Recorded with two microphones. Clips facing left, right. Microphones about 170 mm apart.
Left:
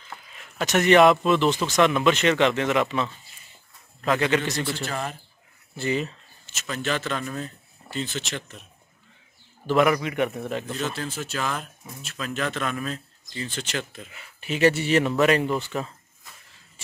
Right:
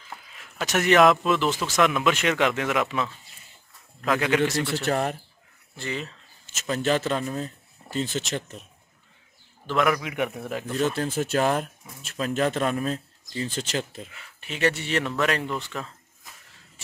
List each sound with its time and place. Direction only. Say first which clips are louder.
0.7 s a man's voice: left 2 dB; 5° right (ahead or behind)
4.8 s speech: right 6 dB; 55° right (ahead or behind)
5.8 s speech: left 6 dB; 5° left (ahead or behind)
6.4 s a sound: even; 45° right (ahead or behind)
6.7 s speech: right 4 dB; 35° right (ahead or behind)
7.9 s speech: right 3 dB; 40° right (ahead or behind)
9.7 s speech: left 3 dB; 5° left (ahead or behind)
10.8 s speech: right 5 dB; 45° right (ahead or behind)
12.3 s speech: right 4 dB; 35° right (ahead or behind)
14.1 s speech: left 11 dB; 5° left (ahead or behind)